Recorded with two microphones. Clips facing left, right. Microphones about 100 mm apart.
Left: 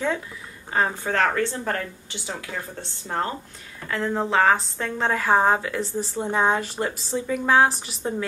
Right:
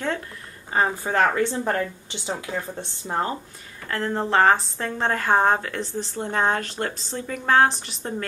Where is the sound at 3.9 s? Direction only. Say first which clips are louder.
Even; centre (ahead or behind).